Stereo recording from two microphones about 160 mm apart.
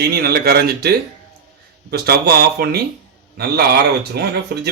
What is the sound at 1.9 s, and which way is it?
Speech, 90° right.